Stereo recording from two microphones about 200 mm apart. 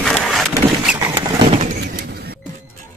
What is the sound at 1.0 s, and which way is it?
Vehicle, 20° right (ahead or behind).